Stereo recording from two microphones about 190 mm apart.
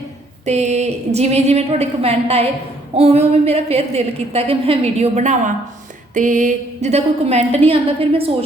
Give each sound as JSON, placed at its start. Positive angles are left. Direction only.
{"t": 0.4, "sound": "a woman's voice", "side_deg": -35}